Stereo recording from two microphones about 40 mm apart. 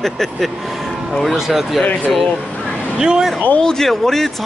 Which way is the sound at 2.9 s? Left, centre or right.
Right.